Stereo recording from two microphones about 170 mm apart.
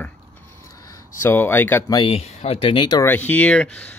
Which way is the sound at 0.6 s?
20° left (ahead or behind).